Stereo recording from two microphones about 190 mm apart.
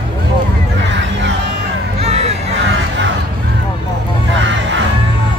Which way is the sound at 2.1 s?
35° right (ahead or behind).